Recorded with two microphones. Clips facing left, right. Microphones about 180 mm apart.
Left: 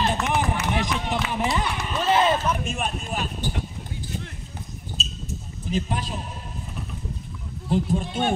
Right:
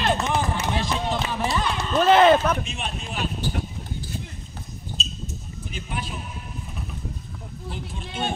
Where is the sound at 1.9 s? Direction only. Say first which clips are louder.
Right 6 dB; 60° right (ahead or behind).